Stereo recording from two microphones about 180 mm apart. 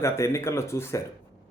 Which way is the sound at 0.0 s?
15° left (ahead or behind).